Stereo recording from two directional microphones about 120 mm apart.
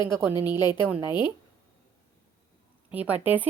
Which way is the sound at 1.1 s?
40° left (ahead or behind).